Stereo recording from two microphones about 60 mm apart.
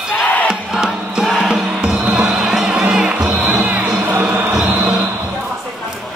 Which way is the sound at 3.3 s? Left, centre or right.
Right.